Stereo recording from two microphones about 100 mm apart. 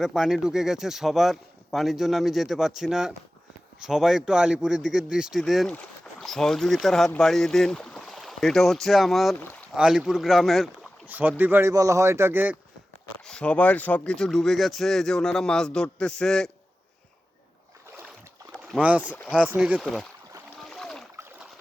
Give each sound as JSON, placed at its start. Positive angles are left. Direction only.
{"t": 0.0, "sound": "a man's voice", "side_deg": -5}
{"t": 11.0, "sound": "speech", "side_deg": -20}
{"t": 11.7, "sound": "speech", "side_deg": -30}
{"t": 13.2, "sound": "speech", "side_deg": 10}
{"t": 18.8, "sound": "a man's voice", "side_deg": -15}
{"t": 20.7, "sound": "splash", "side_deg": 0}